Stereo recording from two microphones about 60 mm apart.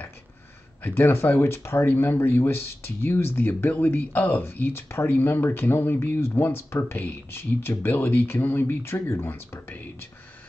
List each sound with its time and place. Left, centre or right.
0.8 s speech: left
9.3 s speech: left